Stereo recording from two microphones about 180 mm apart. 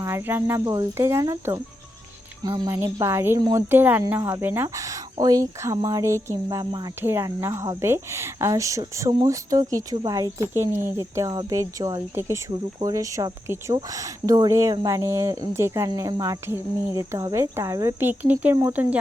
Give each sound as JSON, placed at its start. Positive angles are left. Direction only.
{"t": 0.0, "sound": "a woman's voice", "side_deg": -15}